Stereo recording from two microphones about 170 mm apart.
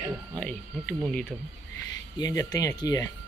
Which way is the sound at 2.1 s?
20° left (ahead or behind).